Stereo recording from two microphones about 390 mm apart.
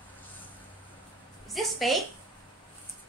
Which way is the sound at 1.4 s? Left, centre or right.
Centre.